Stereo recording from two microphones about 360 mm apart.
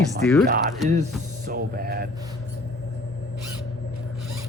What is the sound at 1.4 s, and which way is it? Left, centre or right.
Music, right.